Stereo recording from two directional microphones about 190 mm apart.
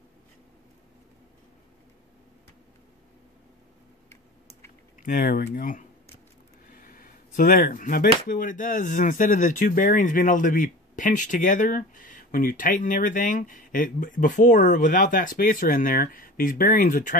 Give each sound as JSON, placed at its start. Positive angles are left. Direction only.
{"t": 5.0, "sound": "speech", "side_deg": 50}